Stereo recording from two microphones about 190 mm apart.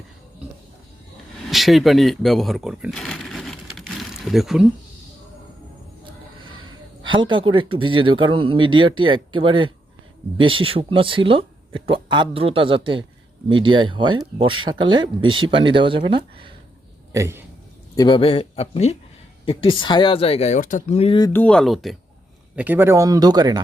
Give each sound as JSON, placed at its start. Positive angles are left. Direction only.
{"t": 1.5, "sound": "a sound", "side_deg": 0}
{"t": 7.3, "sound": "speech", "side_deg": -25}
{"t": 17.1, "sound": "a man's voice", "side_deg": -15}
{"t": 17.9, "sound": "speech", "side_deg": 25}
{"t": 21.2, "sound": "speech", "side_deg": 15}
{"t": 21.4, "sound": "speech", "side_deg": 5}